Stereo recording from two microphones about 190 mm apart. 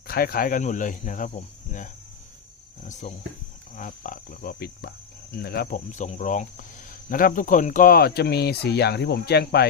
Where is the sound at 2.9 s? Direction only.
40° left (ahead or behind).